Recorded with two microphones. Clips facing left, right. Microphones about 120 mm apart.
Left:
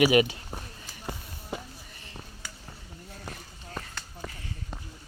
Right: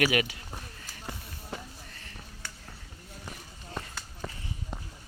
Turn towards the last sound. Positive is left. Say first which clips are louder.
# right 1 dB
turn(degrees=0)  # may be behind; listen again after turning